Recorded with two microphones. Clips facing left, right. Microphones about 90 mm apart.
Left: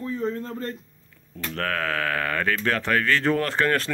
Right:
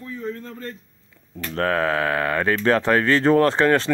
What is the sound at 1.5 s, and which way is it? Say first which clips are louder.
Speech: right 6 dB; 30° right (ahead or behind).